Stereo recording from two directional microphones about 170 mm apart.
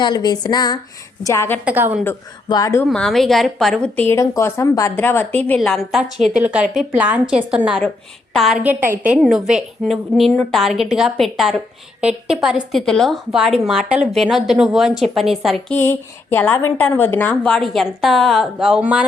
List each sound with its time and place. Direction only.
0.0 s a woman's voice: 25° left (ahead or behind)
1.6 s a woman's voice: 10° right (ahead or behind)
2.5 s speech: 20° left (ahead or behind)
2.9 s a woman's voice: centre (ahead or behind)
3.9 s a woman's voice: 15° left (ahead or behind)
8.6 s a woman's voice: 10° right (ahead or behind)
9.1 s a woman's voice: centre (ahead or behind)
15.7 s a woman's voice: 10° left (ahead or behind); by 19.0 s 5° right (ahead or behind)